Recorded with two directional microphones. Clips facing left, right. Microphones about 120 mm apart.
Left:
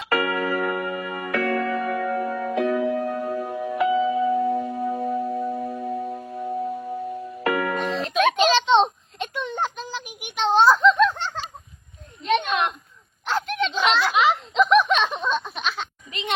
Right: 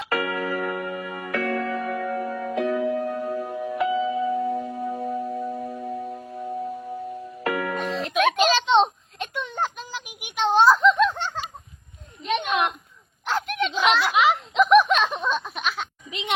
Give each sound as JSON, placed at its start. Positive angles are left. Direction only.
{"t": 0.1, "sound": "music", "side_deg": 80}
{"t": 8.1, "sound": "a sound", "side_deg": 0}
{"t": 13.2, "sound": "snicker", "side_deg": -5}